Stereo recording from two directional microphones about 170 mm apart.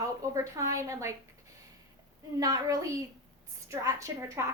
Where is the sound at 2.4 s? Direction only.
20° right (ahead or behind).